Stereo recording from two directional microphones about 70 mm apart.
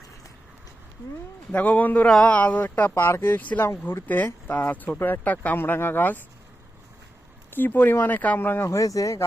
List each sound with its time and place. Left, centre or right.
1.5 s speech: left
3.6 s speech: left
4.0 s speech: left
4.9 s speech: left
5.2 s speech: left
7.5 s speech: left
8.6 s speech: left